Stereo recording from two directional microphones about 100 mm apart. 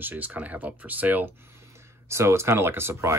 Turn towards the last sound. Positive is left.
turn(degrees=-25)  # may be behind; listen again after turning